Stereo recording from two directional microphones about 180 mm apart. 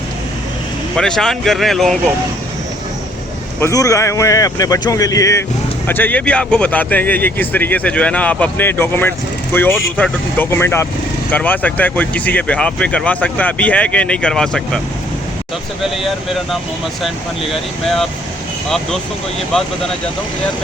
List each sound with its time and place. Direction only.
0.9 s speech: 5° left (ahead or behind)
3.6 s speech: 20° left (ahead or behind); by 14.8 s 5° left (ahead or behind)
17.5 s speech: centre (ahead or behind)